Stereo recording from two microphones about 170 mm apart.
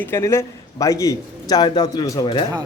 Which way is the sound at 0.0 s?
15° left (ahead or behind).